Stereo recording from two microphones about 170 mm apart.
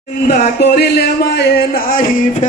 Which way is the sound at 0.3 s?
70° left (ahead or behind).